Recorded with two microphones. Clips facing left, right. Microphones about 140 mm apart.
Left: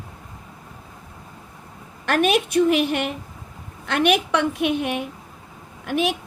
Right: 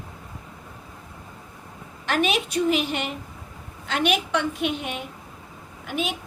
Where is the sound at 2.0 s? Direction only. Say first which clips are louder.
Left 4 dB; 55° left (ahead or behind).